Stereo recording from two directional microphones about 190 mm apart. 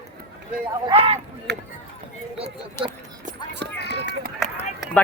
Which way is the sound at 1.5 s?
60° right (ahead or behind).